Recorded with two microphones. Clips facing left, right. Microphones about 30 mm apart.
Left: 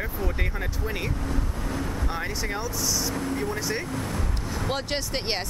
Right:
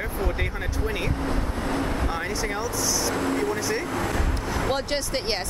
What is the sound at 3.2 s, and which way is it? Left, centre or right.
Speech, right.